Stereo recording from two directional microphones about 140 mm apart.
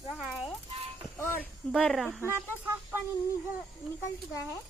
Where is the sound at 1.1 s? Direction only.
15° left (ahead or behind).